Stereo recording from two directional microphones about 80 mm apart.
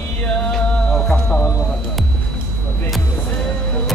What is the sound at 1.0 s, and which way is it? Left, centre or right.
Music, centre.